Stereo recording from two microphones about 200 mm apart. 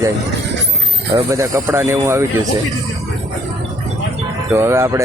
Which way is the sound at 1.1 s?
15° right (ahead or behind).